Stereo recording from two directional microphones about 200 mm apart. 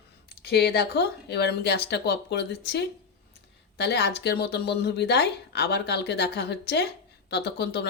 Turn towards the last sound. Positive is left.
turn(degrees=55)  # may be behind; listen again after turning